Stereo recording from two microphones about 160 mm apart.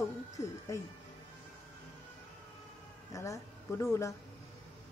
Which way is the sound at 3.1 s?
20° left (ahead or behind).